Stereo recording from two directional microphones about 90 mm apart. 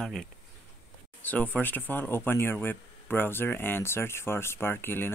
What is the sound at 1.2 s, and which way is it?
Speech, 20° left (ahead or behind).